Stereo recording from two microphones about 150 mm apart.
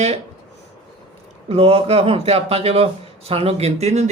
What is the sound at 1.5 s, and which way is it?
A man's voice, 40° right (ahead or behind).